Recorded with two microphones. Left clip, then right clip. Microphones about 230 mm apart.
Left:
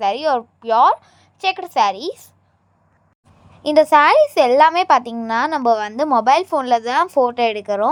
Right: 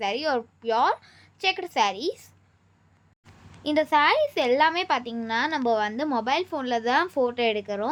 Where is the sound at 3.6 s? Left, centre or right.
Left.